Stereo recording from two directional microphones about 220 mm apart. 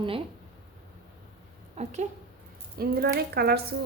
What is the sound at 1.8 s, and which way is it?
Speech, 30° right (ahead or behind).